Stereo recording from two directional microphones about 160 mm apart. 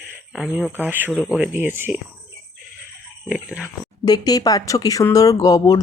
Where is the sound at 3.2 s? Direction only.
5° right (ahead or behind).